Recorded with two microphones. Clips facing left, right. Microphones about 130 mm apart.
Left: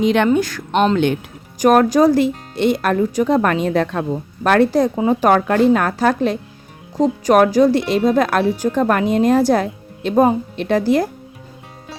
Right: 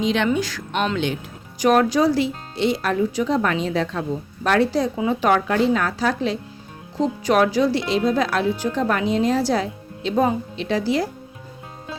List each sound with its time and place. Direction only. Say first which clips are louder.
0.0 s speech: left 6 dB; 55° left (ahead or behind)